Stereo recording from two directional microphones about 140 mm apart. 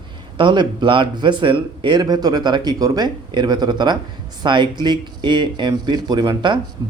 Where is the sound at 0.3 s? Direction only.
35° right (ahead or behind).